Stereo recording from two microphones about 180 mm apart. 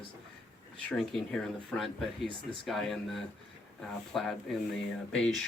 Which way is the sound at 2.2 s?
25° right (ahead or behind).